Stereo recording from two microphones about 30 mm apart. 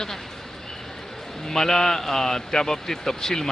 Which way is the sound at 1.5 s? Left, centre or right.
Centre.